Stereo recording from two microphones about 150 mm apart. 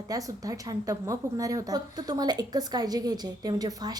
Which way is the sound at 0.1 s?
25° right (ahead or behind).